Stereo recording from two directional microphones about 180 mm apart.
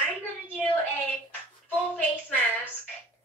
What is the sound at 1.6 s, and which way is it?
Speech, 10° left (ahead or behind).